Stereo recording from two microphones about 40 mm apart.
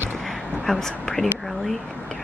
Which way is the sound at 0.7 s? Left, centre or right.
Centre.